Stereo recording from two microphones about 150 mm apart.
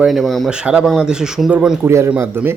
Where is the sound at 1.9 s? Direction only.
15° right (ahead or behind).